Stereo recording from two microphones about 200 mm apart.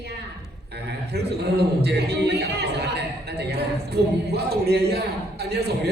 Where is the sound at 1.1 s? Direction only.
55° right (ahead or behind).